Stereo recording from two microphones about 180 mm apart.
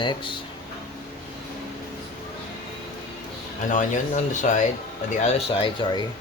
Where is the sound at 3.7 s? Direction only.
45° left (ahead or behind).